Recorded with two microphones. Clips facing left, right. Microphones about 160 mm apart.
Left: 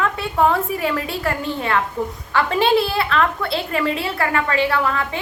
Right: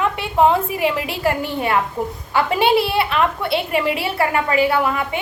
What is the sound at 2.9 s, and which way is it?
A woman's voice, 25° right (ahead or behind).